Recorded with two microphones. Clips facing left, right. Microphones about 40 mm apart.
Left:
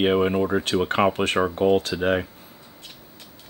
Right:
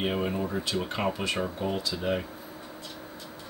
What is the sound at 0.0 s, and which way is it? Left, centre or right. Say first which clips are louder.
Speech: left 9 dB; left.